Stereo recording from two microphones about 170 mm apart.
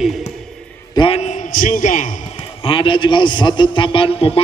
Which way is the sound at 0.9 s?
35° left (ahead or behind).